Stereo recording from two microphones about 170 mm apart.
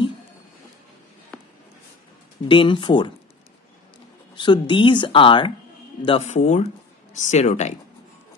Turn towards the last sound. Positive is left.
turn(degrees=40)  # may be behind; listen again after turning